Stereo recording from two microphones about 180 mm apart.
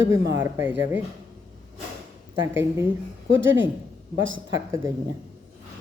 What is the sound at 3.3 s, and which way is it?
Speech, 90° right.